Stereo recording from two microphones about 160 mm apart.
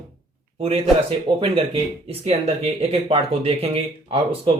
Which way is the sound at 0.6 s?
35° right (ahead or behind).